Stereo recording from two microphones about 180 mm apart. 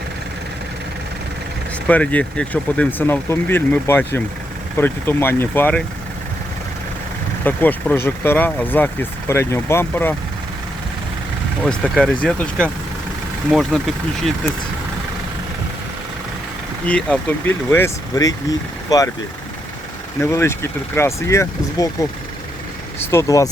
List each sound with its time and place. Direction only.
1.9 s speech: 10° left (ahead or behind)
7.4 s speech: 10° left (ahead or behind)
11.6 s speech: 5° left (ahead or behind)
16.8 s speech: 5° left (ahead or behind)
20.2 s speech: 15° left (ahead or behind)
23.0 s speech: 15° left (ahead or behind)